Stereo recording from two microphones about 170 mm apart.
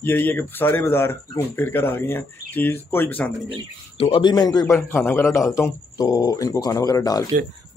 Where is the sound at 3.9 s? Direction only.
35° left (ahead or behind).